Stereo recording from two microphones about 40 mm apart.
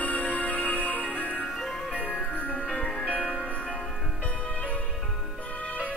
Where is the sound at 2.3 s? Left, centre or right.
Left.